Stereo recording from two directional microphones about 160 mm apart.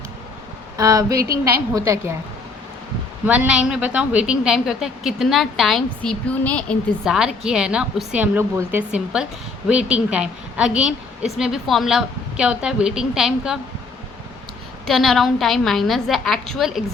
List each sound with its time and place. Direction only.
0.8 s a sound: 20° right (ahead or behind)
1.7 s a woman's voice: 15° right (ahead or behind)
3.2 s a woman's voice: 10° right (ahead or behind)
14.8 s a woman's voice: centre (ahead or behind)